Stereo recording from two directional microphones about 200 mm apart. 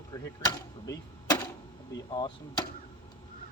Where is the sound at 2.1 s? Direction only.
20° left (ahead or behind).